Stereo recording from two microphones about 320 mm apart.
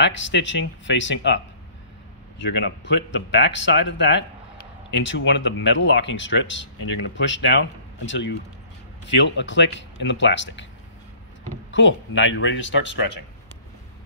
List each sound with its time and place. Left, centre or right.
0.0 s speech: left
11.7 s speech: left